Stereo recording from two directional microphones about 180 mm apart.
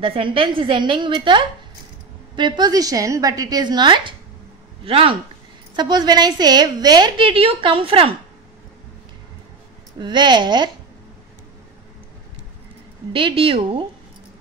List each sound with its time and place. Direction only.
0.0 s a woman's voice: 30° right (ahead or behind)
9.9 s a woman's voice: 25° right (ahead or behind)
13.1 s a woman's voice: 30° right (ahead or behind)